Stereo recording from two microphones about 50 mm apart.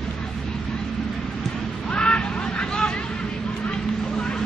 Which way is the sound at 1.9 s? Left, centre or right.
Centre.